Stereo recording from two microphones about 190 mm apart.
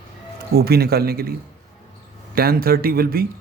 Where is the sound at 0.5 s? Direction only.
55° right (ahead or behind).